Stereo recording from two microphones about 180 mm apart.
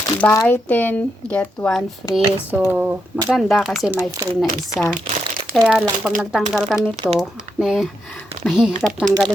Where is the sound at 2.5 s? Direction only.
10° right (ahead or behind).